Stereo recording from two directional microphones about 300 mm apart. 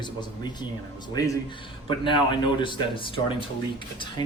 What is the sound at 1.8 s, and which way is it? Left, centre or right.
Speech, centre.